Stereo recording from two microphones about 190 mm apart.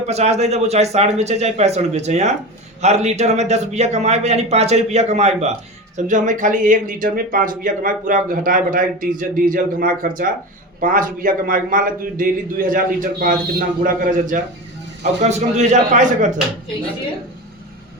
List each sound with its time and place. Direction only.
0.1 s a man's voice: 35° right (ahead or behind)